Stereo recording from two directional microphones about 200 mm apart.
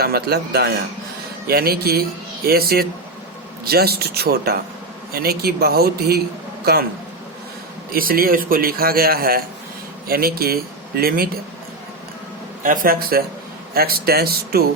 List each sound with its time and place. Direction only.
0.0 s a man's voice: 50° right (ahead or behind)
7.9 s a man's voice: 45° right (ahead or behind)
12.6 s a man's voice: 45° right (ahead or behind)